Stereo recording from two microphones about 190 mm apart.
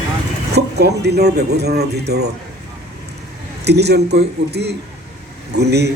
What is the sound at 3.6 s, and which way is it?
A man's voice, 60° right (ahead or behind).